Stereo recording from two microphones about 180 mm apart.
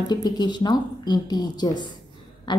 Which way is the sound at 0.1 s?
25° left (ahead or behind).